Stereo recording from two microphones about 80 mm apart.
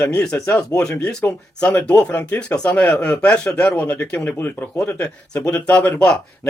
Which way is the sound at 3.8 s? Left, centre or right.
Left.